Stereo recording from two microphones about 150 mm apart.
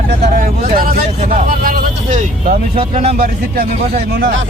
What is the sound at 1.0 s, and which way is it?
Vehicle, 45° right (ahead or behind).